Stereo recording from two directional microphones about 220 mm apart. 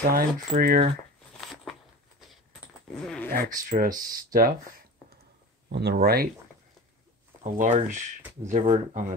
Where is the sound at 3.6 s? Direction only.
40° right (ahead or behind).